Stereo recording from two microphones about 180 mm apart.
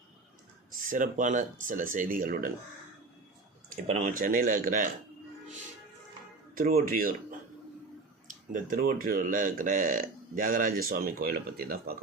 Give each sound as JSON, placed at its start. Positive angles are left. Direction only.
{"t": 0.7, "sound": "speech", "side_deg": -50}
{"t": 3.8, "sound": "speech", "side_deg": -45}
{"t": 6.5, "sound": "music", "side_deg": -50}
{"t": 6.8, "sound": "speech", "side_deg": -50}